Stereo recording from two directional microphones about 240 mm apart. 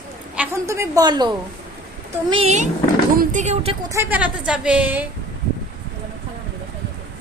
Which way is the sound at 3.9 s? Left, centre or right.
Centre.